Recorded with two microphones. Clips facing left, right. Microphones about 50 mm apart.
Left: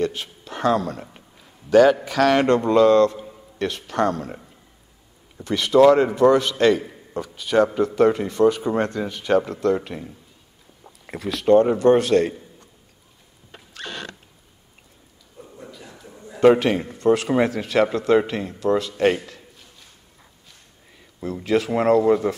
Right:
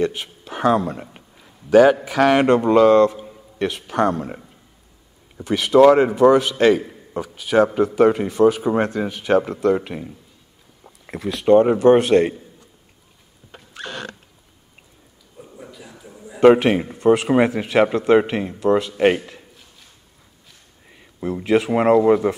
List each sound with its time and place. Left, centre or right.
0.0 s speech: centre
3.3 s a sound: centre
4.1 s speech: right
5.4 s a man's voice: centre
13.7 s rodents: centre
15.3 s a sound: centre
16.3 s speech: centre
21.0 s speech: right